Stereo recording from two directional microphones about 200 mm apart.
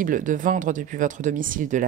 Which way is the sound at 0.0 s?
40° right (ahead or behind).